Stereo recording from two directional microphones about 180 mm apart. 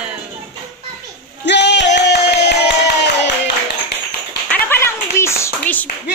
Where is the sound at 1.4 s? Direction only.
75° left (ahead or behind).